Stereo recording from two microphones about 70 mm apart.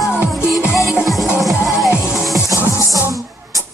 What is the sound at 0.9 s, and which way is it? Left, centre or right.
Music, centre.